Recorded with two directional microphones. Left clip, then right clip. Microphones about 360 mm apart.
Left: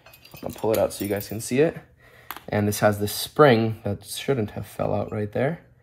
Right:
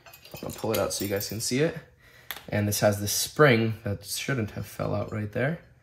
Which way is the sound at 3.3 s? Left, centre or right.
Centre.